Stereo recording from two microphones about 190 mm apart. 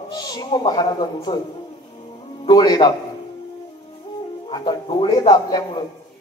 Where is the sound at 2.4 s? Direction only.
20° left (ahead or behind).